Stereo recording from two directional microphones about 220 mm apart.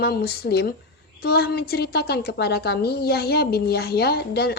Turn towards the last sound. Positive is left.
turn(degrees=45)  # may be behind; listen again after turning